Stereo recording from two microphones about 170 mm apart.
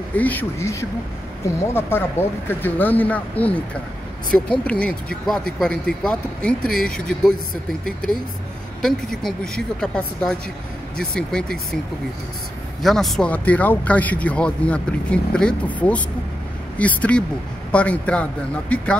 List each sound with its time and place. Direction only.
0.1 s a woman's voice: 10° left (ahead or behind)
8.8 s a woman's voice: 5° left (ahead or behind)
12.8 s speech: centre (ahead or behind)